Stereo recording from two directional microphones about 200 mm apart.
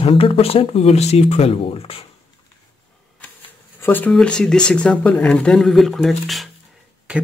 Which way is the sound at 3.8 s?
10° left (ahead or behind).